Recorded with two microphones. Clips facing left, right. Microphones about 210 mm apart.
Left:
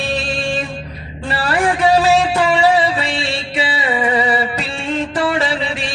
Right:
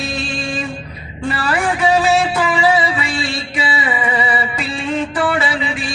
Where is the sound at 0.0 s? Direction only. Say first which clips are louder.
Left 3 dB; 35° left (ahead or behind).